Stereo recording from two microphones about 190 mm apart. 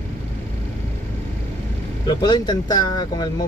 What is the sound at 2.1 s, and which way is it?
Speech, 20° left (ahead or behind).